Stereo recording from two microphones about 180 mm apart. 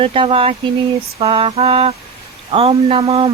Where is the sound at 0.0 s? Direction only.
30° right (ahead or behind).